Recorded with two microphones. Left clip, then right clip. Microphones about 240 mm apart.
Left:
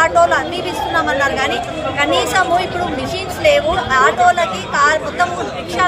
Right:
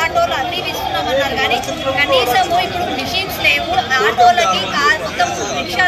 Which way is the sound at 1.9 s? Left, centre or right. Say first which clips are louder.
Right 2 dB; centre.